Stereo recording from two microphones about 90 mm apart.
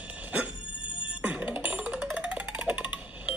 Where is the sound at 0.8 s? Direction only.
70° left (ahead or behind).